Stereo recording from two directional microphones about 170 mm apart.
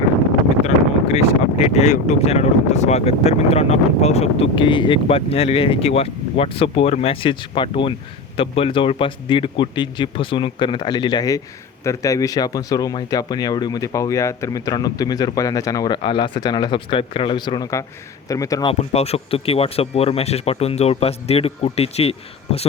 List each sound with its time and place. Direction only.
0.6 s speech: 40° left (ahead or behind); by 18.7 s 20° left (ahead or behind)
18.7 s speech: 35° left (ahead or behind)